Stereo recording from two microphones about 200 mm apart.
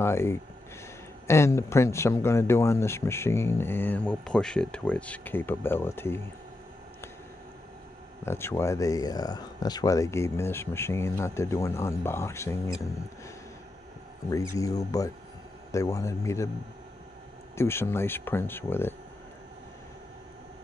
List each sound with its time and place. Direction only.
0.0 s speech: 15° left (ahead or behind)
8.3 s speech: 10° left (ahead or behind)
14.3 s speech: 15° left (ahead or behind)
17.6 s speech: 10° left (ahead or behind)